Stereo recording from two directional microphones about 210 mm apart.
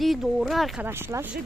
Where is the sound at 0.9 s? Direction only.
10° right (ahead or behind).